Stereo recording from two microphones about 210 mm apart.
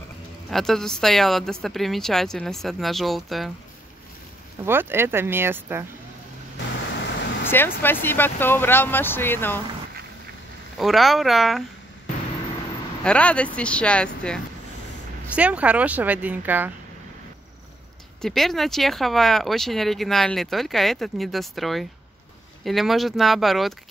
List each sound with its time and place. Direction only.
0.5 s speech: centre (ahead or behind)
4.6 s a woman's voice: 10° right (ahead or behind)
6.7 s a sound: 55° left (ahead or behind)
7.8 s speech: 10° left (ahead or behind)
10.8 s speech: centre (ahead or behind)
13.0 s speech: 5° left (ahead or behind)
15.3 s a woman's voice: 5° right (ahead or behind)
18.2 s speech: centre (ahead or behind)